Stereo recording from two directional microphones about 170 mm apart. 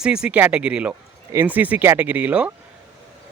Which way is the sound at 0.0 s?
5° right (ahead or behind).